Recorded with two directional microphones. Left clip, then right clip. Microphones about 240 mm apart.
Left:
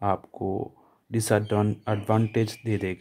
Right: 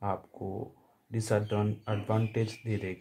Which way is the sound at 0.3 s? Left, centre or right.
Left.